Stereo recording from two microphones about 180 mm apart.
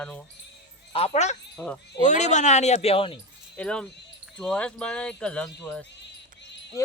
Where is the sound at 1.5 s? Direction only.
5° left (ahead or behind).